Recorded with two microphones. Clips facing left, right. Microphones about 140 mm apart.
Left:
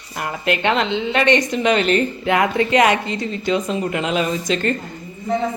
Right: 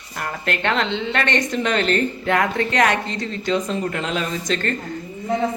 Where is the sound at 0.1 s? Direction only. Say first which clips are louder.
Left 4 dB; 10° left (ahead or behind).